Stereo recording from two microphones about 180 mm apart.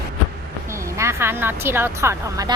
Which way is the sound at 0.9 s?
15° right (ahead or behind).